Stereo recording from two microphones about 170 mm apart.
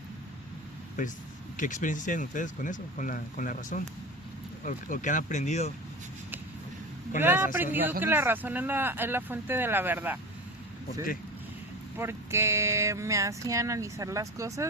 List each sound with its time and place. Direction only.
1.5 s speech: 50° left (ahead or behind)
7.2 s speech: 10° right (ahead or behind)
11.9 s speech: 15° right (ahead or behind)